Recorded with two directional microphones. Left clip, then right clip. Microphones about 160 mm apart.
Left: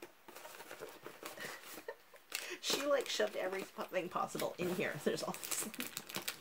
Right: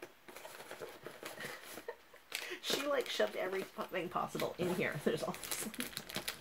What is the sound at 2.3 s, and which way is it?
Speech, 35° left (ahead or behind).